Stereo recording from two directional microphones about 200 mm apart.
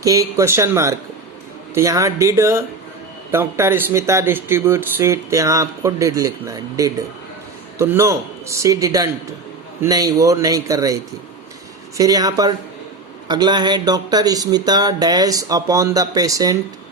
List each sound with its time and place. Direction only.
0.0 s speech: 15° right (ahead or behind)